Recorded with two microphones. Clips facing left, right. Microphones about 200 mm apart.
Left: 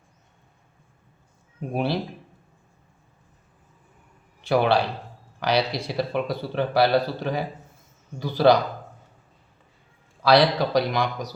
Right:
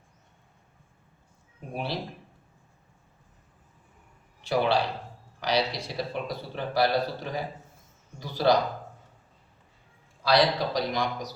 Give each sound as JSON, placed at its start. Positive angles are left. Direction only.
{"t": 1.7, "sound": "a man's voice", "side_deg": 60}
{"t": 4.4, "sound": "a man's voice", "side_deg": 60}
{"t": 10.2, "sound": "a man's voice", "side_deg": 65}